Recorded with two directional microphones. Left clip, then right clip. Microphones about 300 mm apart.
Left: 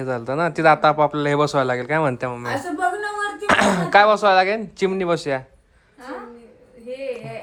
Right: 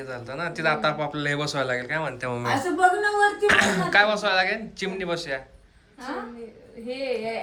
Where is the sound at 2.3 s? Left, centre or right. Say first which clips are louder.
Right 1 dB; centre.